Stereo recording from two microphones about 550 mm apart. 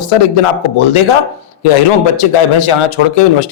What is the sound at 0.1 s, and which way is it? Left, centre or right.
A man's voice, left.